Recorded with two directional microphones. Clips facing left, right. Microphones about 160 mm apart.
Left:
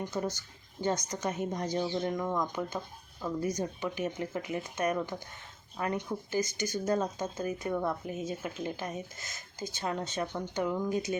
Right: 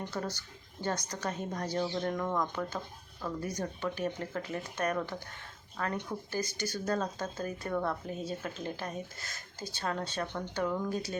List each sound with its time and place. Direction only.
0.0 s a woman's voice: 15° left (ahead or behind)